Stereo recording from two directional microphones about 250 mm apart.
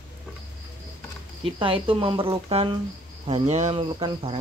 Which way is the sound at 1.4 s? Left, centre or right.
Right.